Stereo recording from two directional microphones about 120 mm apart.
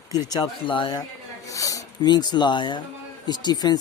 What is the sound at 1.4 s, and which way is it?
Speech, 25° left (ahead or behind).